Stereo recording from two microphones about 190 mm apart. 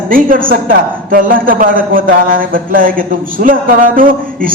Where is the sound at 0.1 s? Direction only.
45° right (ahead or behind).